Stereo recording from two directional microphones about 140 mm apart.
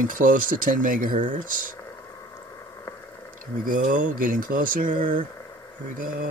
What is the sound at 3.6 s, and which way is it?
Speech, 75° right (ahead or behind).